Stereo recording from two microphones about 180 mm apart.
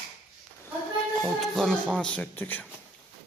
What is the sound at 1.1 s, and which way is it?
Speech, 5° left (ahead or behind).